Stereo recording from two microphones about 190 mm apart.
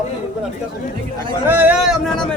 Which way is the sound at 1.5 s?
10° right (ahead or behind).